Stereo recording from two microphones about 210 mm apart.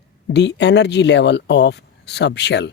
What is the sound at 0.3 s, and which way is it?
Speech, 55° left (ahead or behind).